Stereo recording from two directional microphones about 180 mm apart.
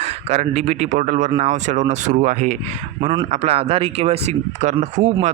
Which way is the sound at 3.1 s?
30° right (ahead or behind).